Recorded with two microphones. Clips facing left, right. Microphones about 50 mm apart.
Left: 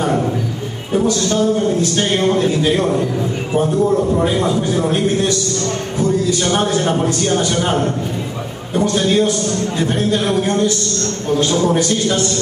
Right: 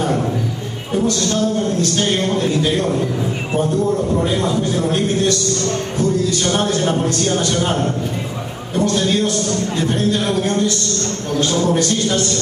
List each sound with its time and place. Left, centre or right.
0.9 s a man's voice: centre
4.1 s a man's voice: centre
10.4 s a man's voice: centre